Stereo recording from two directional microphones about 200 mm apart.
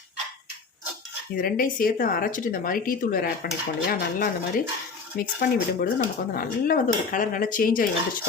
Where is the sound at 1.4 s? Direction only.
45° left (ahead or behind).